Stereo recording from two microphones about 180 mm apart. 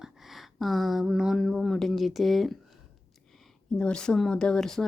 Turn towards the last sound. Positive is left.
turn(degrees=5)  # may be behind; listen again after turning